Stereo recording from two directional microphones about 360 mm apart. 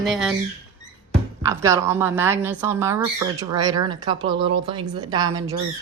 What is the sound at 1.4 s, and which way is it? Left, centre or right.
Speech, centre.